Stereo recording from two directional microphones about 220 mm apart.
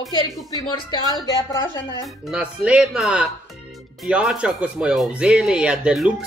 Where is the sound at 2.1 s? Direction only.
5° right (ahead or behind).